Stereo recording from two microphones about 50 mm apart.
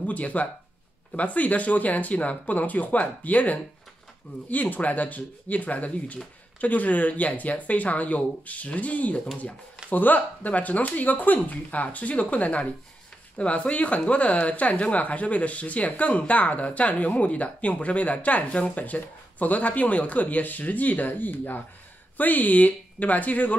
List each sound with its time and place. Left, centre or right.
0.0 s speech: left